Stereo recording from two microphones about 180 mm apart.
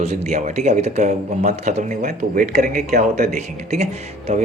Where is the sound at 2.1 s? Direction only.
50° right (ahead or behind).